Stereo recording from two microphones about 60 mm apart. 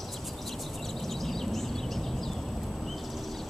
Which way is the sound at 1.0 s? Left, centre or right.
Centre.